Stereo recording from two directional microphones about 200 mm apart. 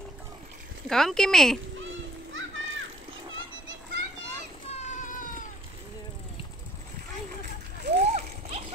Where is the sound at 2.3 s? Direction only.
75° right (ahead or behind).